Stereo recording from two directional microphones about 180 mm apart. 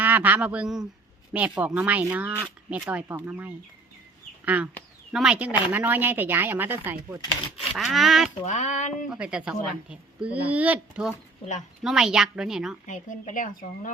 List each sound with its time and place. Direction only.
0.0 s a woman's voice: 10° right (ahead or behind)
7.8 s speech: centre (ahead or behind)
8.4 s child singing: 40° left (ahead or behind)
9.0 s speech: 5° right (ahead or behind)
12.9 s a woman's voice: 45° left (ahead or behind)